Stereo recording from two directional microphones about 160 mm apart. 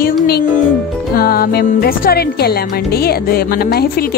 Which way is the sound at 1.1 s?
70° left (ahead or behind).